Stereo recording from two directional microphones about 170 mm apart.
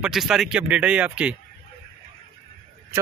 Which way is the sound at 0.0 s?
5° right (ahead or behind).